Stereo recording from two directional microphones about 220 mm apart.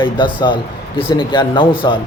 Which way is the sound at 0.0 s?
20° left (ahead or behind).